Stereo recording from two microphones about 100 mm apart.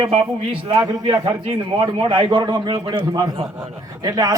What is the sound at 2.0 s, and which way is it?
A man's voice, 55° right (ahead or behind).